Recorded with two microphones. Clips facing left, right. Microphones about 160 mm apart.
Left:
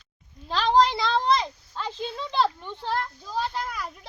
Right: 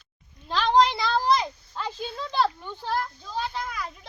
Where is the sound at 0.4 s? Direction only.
Centre (ahead or behind).